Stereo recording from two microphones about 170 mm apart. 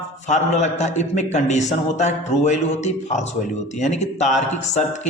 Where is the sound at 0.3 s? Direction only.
45° left (ahead or behind).